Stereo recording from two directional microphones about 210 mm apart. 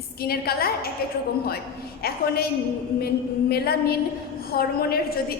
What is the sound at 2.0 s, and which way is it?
Speech, 45° left (ahead or behind).